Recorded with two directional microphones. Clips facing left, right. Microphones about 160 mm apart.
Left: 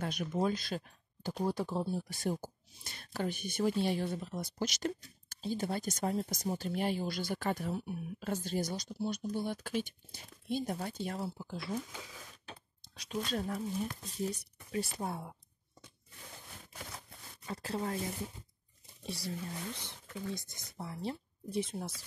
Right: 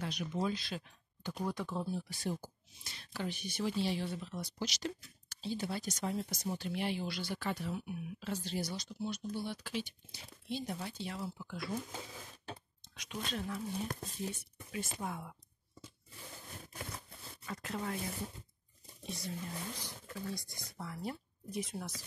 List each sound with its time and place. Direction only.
0.0 s speech: 50° left (ahead or behind)
1.4 s speech: 30° left (ahead or behind)
2.0 s speech: 50° left (ahead or behind)
9.3 s speech: 50° left (ahead or behind)
11.2 s speech: 30° left (ahead or behind)
12.8 s speech: 35° left (ahead or behind)
17.5 s speech: 30° left (ahead or behind)
19.0 s speech: 35° left (ahead or behind)